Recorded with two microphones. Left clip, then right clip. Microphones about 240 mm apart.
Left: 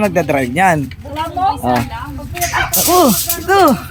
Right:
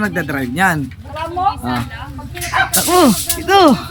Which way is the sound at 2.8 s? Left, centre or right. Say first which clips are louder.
Left 3 dB; centre.